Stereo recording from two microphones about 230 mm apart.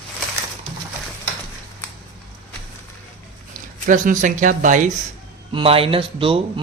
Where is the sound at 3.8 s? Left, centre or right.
Right.